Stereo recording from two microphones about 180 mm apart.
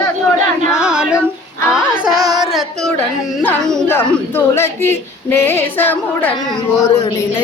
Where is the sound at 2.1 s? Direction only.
20° right (ahead or behind).